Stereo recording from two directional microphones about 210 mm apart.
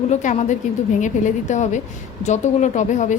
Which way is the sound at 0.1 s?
35° left (ahead or behind).